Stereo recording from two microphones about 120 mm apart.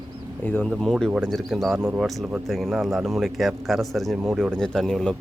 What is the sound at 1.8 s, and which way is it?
Speech, 15° right (ahead or behind).